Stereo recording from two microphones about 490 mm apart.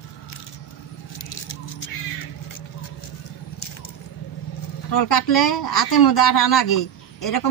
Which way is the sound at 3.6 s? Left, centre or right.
Left.